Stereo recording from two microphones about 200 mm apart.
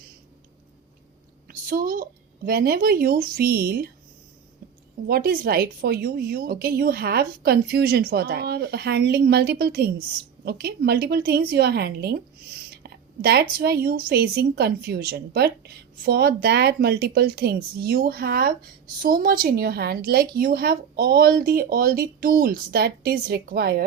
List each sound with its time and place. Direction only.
1.5 s speech: 45° right (ahead or behind)
5.0 s a woman's voice: 50° right (ahead or behind)